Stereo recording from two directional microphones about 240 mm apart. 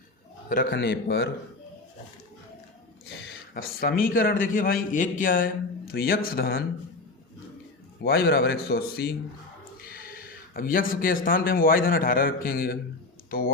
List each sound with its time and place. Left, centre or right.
0.4 s a man's voice: left
3.2 s a man's voice: left
8.0 s a man's voice: left